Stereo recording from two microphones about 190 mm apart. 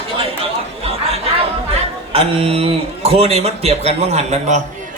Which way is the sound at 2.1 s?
30° right (ahead or behind).